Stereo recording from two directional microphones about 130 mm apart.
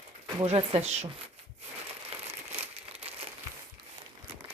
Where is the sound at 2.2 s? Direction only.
55° right (ahead or behind).